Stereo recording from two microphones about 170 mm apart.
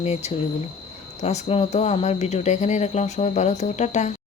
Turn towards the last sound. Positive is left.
turn(degrees=45)  # may be behind; listen again after turning